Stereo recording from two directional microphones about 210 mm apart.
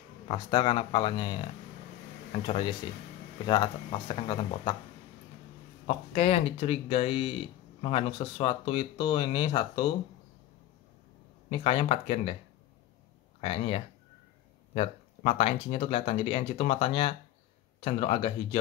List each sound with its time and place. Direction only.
0.3 s speech: 25° left (ahead or behind)
5.9 s speech: 30° left (ahead or behind)
11.5 s speech: 25° left (ahead or behind)
13.4 s speech: 30° left (ahead or behind)